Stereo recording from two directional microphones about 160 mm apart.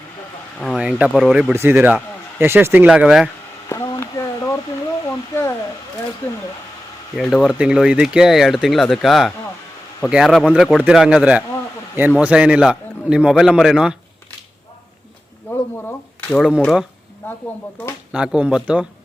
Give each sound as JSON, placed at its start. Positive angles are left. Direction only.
{"t": 0.8, "sound": "speech", "side_deg": -5}
{"t": 1.5, "sound": "speech", "side_deg": -15}
{"t": 3.7, "sound": "a sound", "side_deg": 20}
{"t": 7.2, "sound": "speech", "side_deg": 0}
{"t": 15.4, "sound": "speech", "side_deg": 10}
{"t": 17.2, "sound": "speech", "side_deg": 10}
{"t": 18.1, "sound": "speech", "side_deg": -5}